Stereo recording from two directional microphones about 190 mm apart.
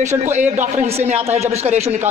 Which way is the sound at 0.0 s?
40° right (ahead or behind).